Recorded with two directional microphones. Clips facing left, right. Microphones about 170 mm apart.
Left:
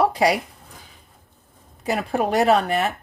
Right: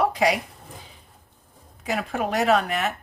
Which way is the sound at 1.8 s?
35° left (ahead or behind).